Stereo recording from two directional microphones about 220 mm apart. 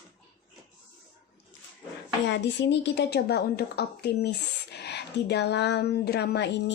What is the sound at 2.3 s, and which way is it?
A woman's voice, 50° left (ahead or behind).